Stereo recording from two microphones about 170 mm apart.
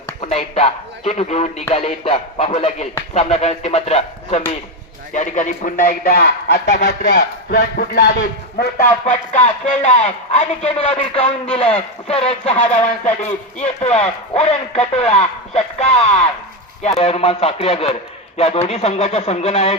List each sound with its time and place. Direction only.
0.2 s speech: 35° left (ahead or behind); by 6.7 s 70° left (ahead or behind)
6.7 s speech: 50° left (ahead or behind)
7.5 s speech: 75° left (ahead or behind)
8.5 s speech: 50° left (ahead or behind)
13.6 s speech: 40° left (ahead or behind)